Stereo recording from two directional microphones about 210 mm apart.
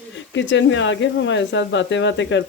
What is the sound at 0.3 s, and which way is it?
Speech, 60° left (ahead or behind).